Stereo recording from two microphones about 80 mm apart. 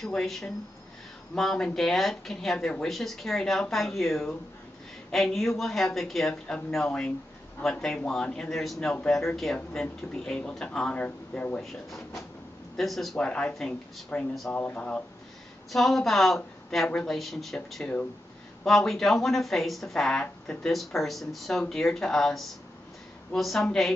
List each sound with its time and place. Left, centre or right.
0.0 s speech: centre
12.7 s speech: centre
13.2 s speech: centre
14.5 s speech: centre
15.7 s speech: centre
18.6 s speech: centre